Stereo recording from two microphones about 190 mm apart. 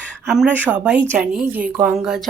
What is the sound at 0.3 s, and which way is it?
A woman's voice, 5° right (ahead or behind).